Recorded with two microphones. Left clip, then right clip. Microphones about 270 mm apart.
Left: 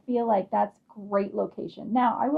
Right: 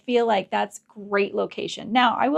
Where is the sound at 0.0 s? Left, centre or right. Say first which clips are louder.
Right 4 dB; right.